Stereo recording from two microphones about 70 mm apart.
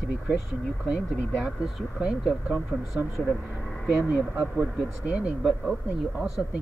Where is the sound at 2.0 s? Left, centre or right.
Centre.